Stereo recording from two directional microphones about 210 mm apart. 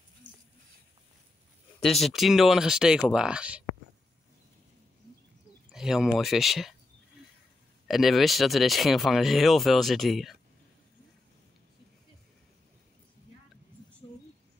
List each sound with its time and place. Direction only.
1.8 s speech: centre (ahead or behind)
5.7 s speech: centre (ahead or behind)
7.9 s speech: centre (ahead or behind)